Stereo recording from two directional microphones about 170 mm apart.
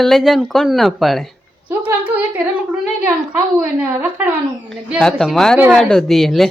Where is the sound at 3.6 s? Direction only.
10° right (ahead or behind).